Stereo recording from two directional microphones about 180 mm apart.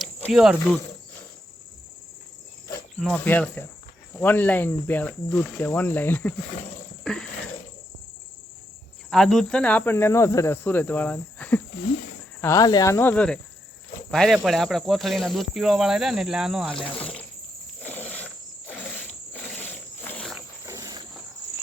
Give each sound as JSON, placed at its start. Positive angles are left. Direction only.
{"t": 0.0, "sound": "cricket", "side_deg": 0}
{"t": 3.0, "sound": "speech", "side_deg": 10}
{"t": 7.0, "sound": "a sound", "side_deg": 5}
{"t": 9.0, "sound": "speech", "side_deg": 0}
{"t": 16.7, "sound": "speech", "side_deg": 30}
{"t": 17.0, "sound": "cricket", "side_deg": 5}
{"t": 17.8, "sound": "wild animals", "side_deg": 10}
{"t": 20.7, "sound": "cricket", "side_deg": -20}